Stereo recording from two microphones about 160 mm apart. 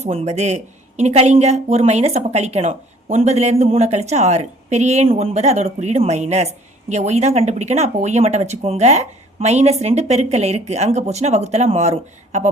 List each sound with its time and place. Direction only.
0.0 s speech: 40° right (ahead or behind)